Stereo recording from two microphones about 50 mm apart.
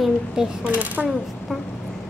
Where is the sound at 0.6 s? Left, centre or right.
Right.